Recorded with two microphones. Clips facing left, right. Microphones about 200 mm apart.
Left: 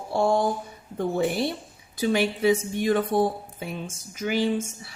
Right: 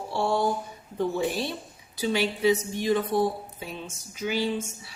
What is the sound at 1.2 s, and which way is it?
A woman's voice, 55° left (ahead or behind).